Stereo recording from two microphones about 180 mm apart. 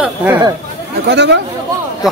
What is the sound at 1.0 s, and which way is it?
Speech, 70° right (ahead or behind).